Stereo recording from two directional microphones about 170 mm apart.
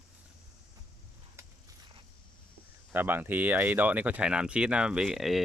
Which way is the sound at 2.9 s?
10° right (ahead or behind).